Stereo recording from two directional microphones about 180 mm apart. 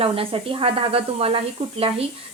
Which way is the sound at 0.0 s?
30° right (ahead or behind).